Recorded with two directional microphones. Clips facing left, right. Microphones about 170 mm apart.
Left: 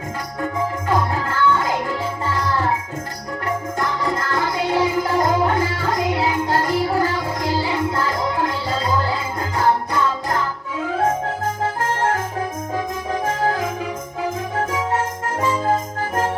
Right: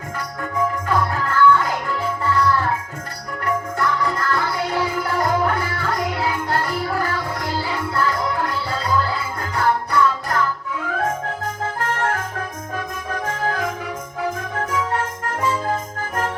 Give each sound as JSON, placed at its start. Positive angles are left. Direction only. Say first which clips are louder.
{"t": 0.9, "sound": "music", "louder": "left 1 dB", "side_deg": 20}
{"t": 15.4, "sound": "jingle bell", "louder": "left 3 dB", "side_deg": 20}